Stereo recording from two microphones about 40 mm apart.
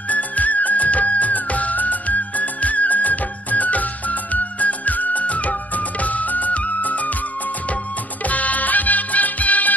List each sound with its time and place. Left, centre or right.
0.1 s music of bollywood: left
8.2 s music: left